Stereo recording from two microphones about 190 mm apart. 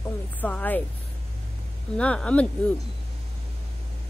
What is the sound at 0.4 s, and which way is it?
Speech, 10° left (ahead or behind).